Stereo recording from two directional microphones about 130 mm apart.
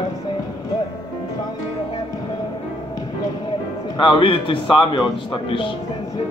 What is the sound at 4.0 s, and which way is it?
A man's voice, 40° left (ahead or behind).